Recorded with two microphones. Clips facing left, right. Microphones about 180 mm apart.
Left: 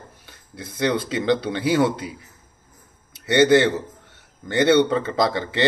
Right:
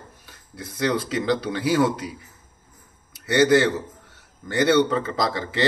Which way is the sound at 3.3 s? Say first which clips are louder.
Left 2 dB; 25° left (ahead or behind).